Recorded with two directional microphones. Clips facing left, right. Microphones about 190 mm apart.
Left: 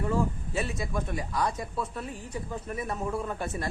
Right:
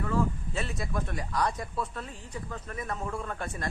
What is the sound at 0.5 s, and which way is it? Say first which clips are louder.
Speech: left 2 dB; 5° left (ahead or behind).